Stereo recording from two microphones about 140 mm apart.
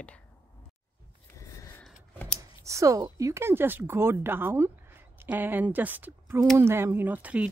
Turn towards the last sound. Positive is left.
turn(degrees=-10)  # may be behind; listen again after turning